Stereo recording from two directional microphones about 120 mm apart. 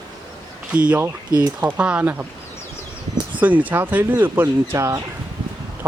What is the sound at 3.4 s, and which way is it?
Speech, 15° right (ahead or behind).